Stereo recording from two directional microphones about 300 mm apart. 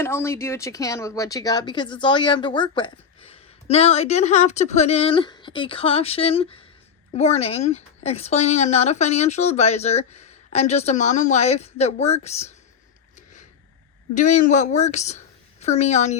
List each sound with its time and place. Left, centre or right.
0.0 s speech: centre
14.1 s speech: left